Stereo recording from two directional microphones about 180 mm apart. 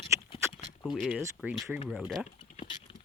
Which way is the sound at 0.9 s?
Centre (ahead or behind).